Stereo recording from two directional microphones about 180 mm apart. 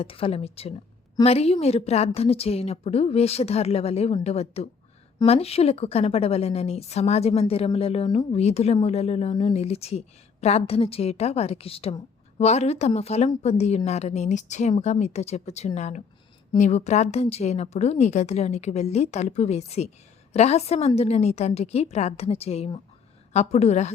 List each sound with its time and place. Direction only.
0.0 s a woman's voice: 30° left (ahead or behind)